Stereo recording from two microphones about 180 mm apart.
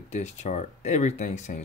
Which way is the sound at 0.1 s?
40° left (ahead or behind).